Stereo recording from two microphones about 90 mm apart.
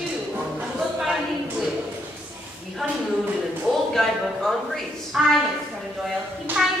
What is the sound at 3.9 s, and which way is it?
Speech, centre (ahead or behind).